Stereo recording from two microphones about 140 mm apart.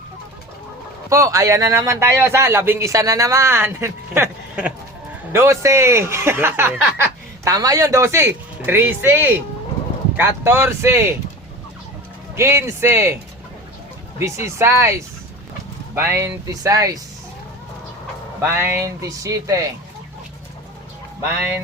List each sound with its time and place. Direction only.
1.1 s speech: 25° right (ahead or behind)
12.4 s speech: 20° right (ahead or behind)
14.2 s speech: 20° right (ahead or behind)
18.3 s speech: 20° right (ahead or behind)
21.2 s speech: 20° right (ahead or behind)